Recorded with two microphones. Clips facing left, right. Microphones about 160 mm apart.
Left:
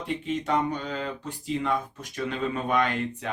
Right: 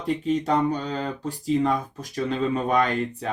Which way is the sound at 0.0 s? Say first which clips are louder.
Right 5 dB; 40° right (ahead or behind).